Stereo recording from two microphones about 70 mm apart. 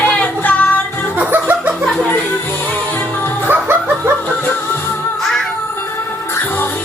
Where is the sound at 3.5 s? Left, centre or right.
Right.